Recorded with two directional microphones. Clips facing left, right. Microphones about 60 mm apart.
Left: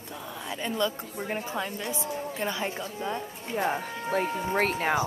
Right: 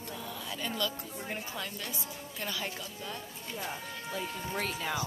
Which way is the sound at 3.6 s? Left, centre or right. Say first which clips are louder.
Left 11 dB; left.